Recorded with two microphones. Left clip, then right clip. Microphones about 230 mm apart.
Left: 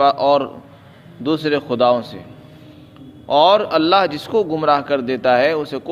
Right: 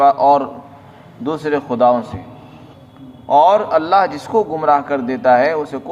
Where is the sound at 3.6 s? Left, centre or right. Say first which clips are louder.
Right 1 dB; left.